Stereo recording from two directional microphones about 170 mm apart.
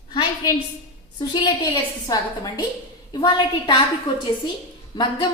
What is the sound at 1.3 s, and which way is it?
A woman's voice, 25° left (ahead or behind).